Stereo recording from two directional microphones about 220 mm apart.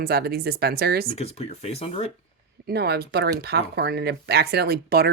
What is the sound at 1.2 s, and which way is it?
Speech, 30° left (ahead or behind).